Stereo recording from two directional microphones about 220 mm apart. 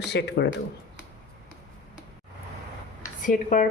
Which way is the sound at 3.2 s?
35° left (ahead or behind).